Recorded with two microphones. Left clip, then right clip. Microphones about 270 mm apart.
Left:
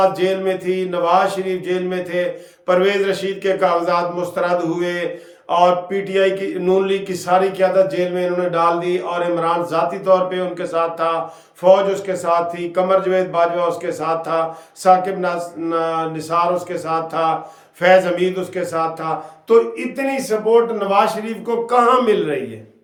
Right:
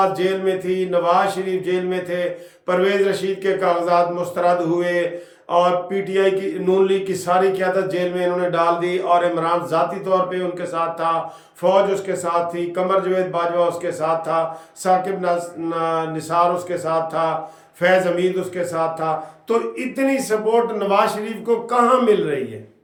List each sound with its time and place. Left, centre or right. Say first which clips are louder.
0.0 s speech: left 2 dB; centre